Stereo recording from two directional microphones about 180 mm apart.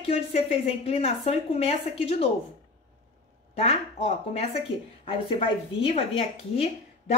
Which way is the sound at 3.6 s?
35° left (ahead or behind).